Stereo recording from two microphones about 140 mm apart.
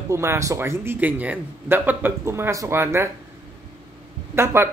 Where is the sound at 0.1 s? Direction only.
20° right (ahead or behind).